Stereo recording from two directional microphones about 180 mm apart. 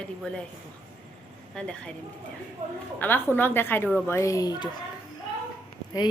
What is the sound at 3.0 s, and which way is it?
A woman's voice, 10° left (ahead or behind).